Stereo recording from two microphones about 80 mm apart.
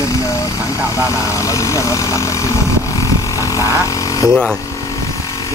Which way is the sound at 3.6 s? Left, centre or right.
Right.